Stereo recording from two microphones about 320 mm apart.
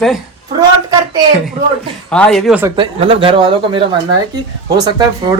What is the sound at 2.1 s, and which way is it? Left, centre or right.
Speech, centre.